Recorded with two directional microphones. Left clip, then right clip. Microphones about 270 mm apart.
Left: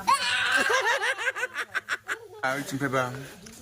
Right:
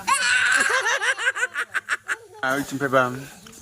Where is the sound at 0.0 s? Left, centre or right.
Centre.